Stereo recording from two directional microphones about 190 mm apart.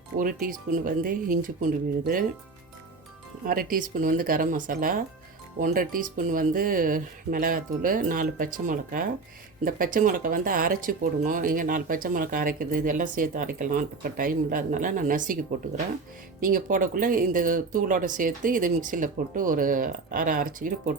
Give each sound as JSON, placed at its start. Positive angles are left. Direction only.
{"t": 0.2, "sound": "speech", "side_deg": -50}
{"t": 3.4, "sound": "speech", "side_deg": -50}
{"t": 16.4, "sound": "speech", "side_deg": -45}